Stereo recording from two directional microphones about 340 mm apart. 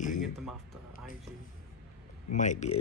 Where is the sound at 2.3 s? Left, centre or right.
Left.